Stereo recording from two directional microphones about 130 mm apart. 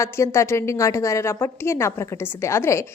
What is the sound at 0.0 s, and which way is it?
A woman's voice, 20° left (ahead or behind).